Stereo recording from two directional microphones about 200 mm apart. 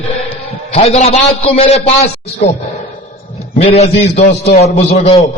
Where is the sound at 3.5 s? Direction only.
30° left (ahead or behind).